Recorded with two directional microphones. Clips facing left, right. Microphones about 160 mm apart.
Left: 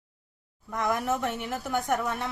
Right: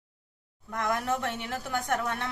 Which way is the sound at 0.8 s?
10° left (ahead or behind).